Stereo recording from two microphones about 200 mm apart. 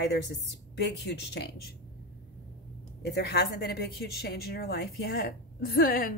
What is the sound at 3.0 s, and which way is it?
Speech, 55° left (ahead or behind).